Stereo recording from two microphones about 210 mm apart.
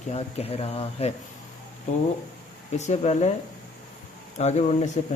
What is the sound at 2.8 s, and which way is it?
Speech, 30° left (ahead or behind).